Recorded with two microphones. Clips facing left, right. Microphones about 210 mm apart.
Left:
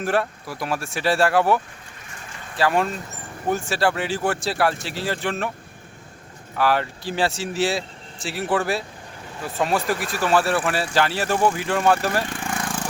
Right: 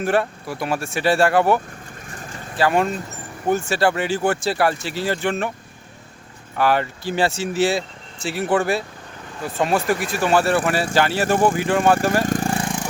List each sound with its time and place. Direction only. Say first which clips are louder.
0.0 s speech: right 3 dB; centre (ahead or behind)
2.6 s speech: right 2 dB; centre (ahead or behind)
6.6 s speech: right 2 dB; centre (ahead or behind)
12.2 s vehicle: right 8 dB; 40° right (ahead or behind)
12.6 s vehicle: right 3 dB; 15° right (ahead or behind)